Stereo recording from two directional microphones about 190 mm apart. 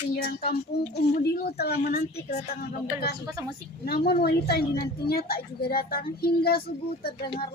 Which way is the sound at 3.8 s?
55° left (ahead or behind).